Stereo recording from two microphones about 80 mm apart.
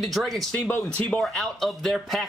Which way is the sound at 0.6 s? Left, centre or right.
Centre.